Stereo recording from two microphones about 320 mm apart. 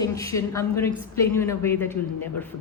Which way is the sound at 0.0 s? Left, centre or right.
Centre.